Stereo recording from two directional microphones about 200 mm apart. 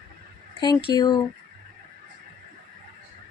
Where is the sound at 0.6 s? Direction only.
25° left (ahead or behind).